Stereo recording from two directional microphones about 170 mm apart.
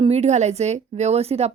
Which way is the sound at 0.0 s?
40° right (ahead or behind).